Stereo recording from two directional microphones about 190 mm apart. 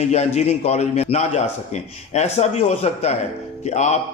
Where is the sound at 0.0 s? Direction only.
35° left (ahead or behind).